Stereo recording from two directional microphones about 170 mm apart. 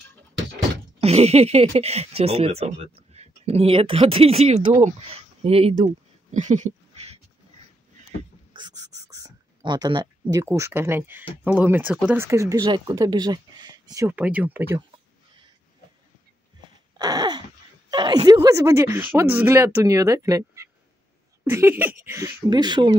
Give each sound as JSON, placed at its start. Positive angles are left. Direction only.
{"t": 1.0, "sound": "speech", "side_deg": -40}
{"t": 8.5, "sound": "a sound", "side_deg": -20}
{"t": 10.3, "sound": "speech", "side_deg": -15}
{"t": 12.3, "sound": "speech", "side_deg": -20}
{"t": 17.0, "sound": "a sound", "side_deg": -25}
{"t": 17.9, "sound": "speech", "side_deg": -25}